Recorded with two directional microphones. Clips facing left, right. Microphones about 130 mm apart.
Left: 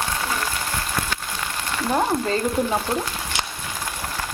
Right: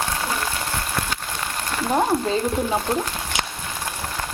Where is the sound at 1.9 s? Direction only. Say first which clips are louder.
Right 1 dB; 5° right (ahead or behind).